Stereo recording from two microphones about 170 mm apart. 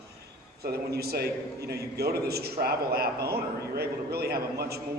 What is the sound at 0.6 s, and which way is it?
A man's voice, 70° right (ahead or behind).